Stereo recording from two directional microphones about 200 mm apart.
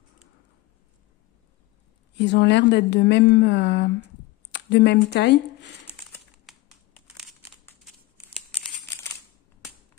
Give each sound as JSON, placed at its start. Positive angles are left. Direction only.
{"t": 2.1, "sound": "a woman's voice", "side_deg": 55}
{"t": 6.5, "sound": "computer keyboard", "side_deg": 0}